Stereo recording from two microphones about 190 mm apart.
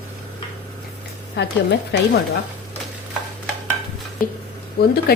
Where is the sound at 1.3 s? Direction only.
65° left (ahead or behind).